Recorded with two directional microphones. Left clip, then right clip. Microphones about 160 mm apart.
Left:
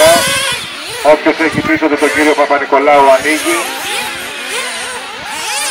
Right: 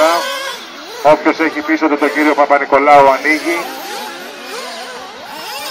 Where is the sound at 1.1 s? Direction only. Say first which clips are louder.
Left 3 dB; 40° right (ahead or behind).